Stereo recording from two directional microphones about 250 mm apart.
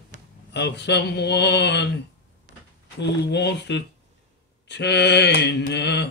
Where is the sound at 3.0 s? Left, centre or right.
Left.